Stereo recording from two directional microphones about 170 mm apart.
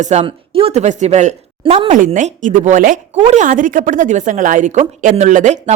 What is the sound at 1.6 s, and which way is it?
Speech, 30° right (ahead or behind).